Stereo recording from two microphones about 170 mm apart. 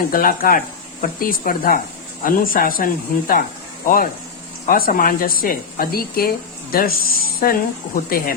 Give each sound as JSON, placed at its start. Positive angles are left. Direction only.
{"t": 0.1, "sound": "speech", "side_deg": 55}